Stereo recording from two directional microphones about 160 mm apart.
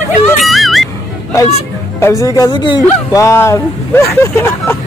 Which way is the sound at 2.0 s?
15° left (ahead or behind).